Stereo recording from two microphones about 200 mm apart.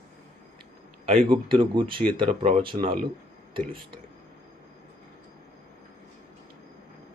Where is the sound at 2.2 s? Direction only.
40° right (ahead or behind).